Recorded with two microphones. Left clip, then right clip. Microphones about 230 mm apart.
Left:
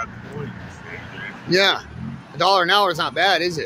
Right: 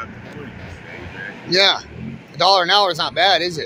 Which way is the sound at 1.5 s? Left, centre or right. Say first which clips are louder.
Right 2 dB; centre.